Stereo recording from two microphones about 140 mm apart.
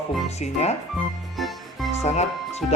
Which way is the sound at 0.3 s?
50° left (ahead or behind).